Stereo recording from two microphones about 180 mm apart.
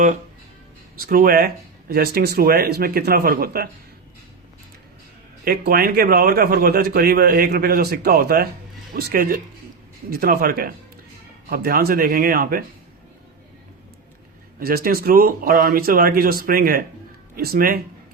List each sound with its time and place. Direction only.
0.9 s a man's voice: 55° right (ahead or behind)
5.5 s a man's voice: 55° right (ahead or behind)
14.6 s a man's voice: 55° right (ahead or behind)